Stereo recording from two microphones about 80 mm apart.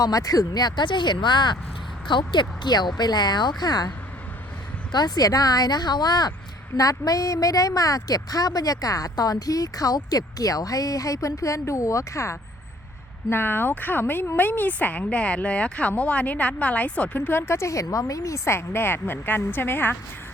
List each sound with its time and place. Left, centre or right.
0.0 s a woman's voice: left
13.3 s speech: left
17.2 s a woman's voice: left
18.4 s speech: left